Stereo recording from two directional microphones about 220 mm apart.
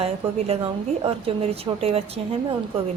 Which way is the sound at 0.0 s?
25° right (ahead or behind).